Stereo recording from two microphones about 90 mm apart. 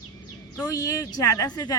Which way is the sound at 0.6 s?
40° left (ahead or behind).